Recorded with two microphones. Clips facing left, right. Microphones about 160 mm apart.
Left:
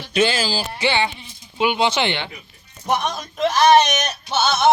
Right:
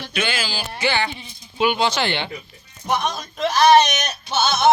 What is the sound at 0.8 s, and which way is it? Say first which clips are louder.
Speech: even; 25° left (ahead or behind).